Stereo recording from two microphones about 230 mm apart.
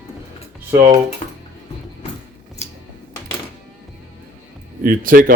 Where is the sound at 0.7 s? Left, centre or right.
Centre.